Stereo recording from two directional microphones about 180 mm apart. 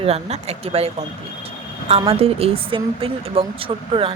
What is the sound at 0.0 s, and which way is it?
Speech, 35° right (ahead or behind).